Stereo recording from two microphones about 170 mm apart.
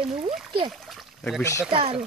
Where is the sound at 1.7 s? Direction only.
30° right (ahead or behind).